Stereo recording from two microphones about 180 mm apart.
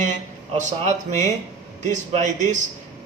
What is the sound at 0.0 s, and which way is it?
Speech, 40° right (ahead or behind).